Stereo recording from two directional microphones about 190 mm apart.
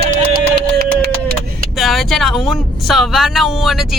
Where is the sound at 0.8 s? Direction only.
55° right (ahead or behind).